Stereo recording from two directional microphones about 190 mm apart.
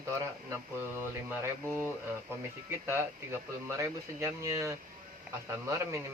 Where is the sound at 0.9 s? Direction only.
10° right (ahead or behind).